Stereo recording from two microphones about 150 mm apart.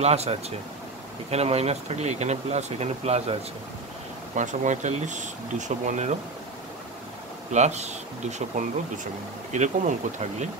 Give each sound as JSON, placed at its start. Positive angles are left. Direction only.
{"t": 0.0, "sound": "speech", "side_deg": -45}
{"t": 4.4, "sound": "speech", "side_deg": -55}
{"t": 7.5, "sound": "speech", "side_deg": -50}